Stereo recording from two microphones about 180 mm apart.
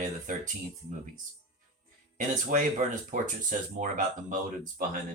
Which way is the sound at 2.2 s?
40° right (ahead or behind).